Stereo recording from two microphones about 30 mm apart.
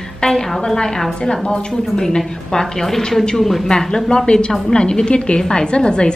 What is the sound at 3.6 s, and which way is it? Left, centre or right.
A woman's voice, left.